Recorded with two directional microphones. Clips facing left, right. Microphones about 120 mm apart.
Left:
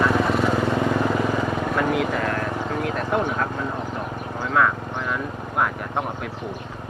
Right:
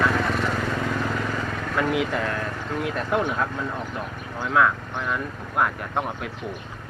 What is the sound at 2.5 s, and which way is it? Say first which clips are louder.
Vehicle: left 5 dB; 20° left (ahead or behind).